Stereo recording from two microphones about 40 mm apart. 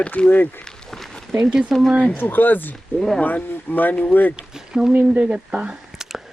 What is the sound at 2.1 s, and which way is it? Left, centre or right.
Speech, left.